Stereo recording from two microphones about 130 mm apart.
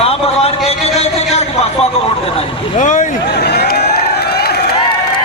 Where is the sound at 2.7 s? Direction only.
70° left (ahead or behind).